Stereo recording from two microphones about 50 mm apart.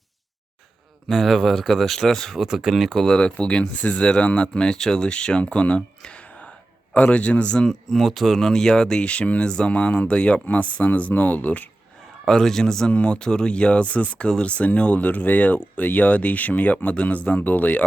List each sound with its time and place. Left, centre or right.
1.0 s speech: centre
2.3 s speech: centre
2.9 s speech: centre
3.2 s speech: centre
12.2 s a man's voice: centre; by 17.8 s left